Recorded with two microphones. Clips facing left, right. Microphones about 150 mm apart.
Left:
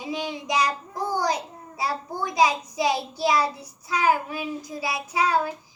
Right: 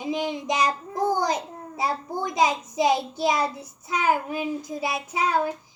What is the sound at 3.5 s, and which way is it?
A child's voice, 50° right (ahead or behind).